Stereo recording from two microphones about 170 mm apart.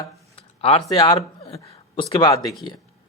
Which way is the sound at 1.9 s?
30° left (ahead or behind).